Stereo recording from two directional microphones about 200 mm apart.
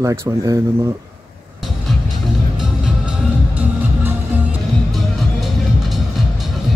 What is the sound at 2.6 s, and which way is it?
Music, 5° right (ahead or behind).